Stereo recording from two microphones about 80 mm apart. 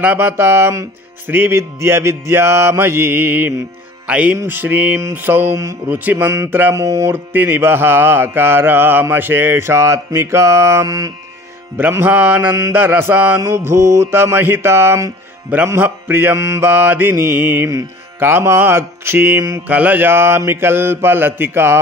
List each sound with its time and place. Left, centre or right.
0.0 s speech: right
4.1 s speech: centre
4.5 s mantra: right
5.9 s mantra: right
6.7 s speech: right
7.3 s mantra: right
11.9 s mantra: right
13.4 s speech: right
15.5 s mantra: right
16.3 s mantra: right
18.2 s speech: right
19.7 s speech: centre